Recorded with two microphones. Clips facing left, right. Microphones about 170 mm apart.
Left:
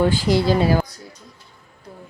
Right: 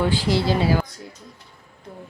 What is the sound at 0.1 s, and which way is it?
Speech, 45° left (ahead or behind).